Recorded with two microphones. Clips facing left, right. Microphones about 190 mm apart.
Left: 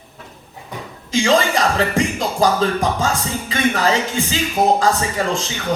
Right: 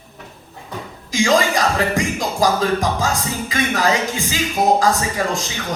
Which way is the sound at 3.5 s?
30° left (ahead or behind).